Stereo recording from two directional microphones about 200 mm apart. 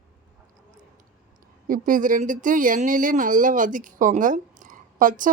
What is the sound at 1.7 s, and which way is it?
A woman's voice, 40° right (ahead or behind).